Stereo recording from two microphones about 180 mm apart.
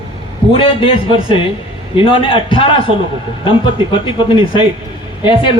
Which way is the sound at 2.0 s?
30° left (ahead or behind).